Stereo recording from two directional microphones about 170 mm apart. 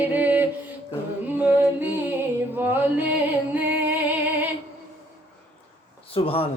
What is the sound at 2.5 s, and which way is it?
Music, 10° right (ahead or behind).